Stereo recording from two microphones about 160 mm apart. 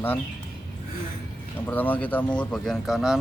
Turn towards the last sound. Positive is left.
turn(degrees=0)  # may be behind; listen again after turning